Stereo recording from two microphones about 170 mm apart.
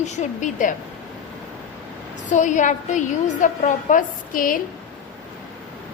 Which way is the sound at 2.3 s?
45° left (ahead or behind).